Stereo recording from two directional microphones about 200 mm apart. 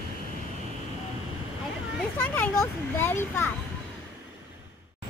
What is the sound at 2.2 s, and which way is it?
Speech, 10° left (ahead or behind).